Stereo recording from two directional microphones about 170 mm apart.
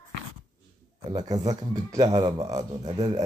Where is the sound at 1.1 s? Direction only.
20° right (ahead or behind).